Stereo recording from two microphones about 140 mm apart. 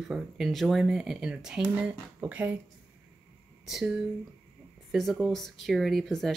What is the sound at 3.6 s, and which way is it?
Speech, 5° right (ahead or behind).